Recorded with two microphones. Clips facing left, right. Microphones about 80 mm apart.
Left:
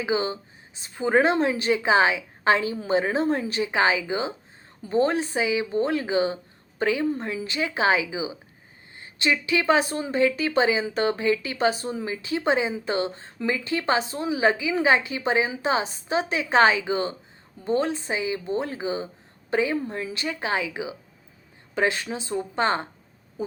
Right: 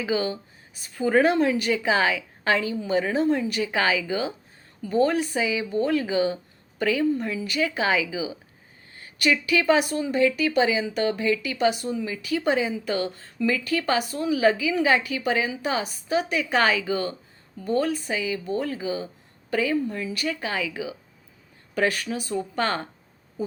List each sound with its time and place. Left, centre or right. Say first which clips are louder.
0.0 s speech: even; left